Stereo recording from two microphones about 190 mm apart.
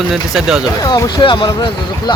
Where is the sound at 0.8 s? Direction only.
20° left (ahead or behind).